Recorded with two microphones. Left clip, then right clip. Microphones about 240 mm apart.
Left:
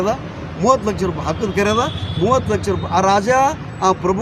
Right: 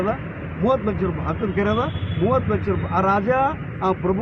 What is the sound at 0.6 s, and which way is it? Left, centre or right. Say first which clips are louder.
Speech: left 5 dB; left.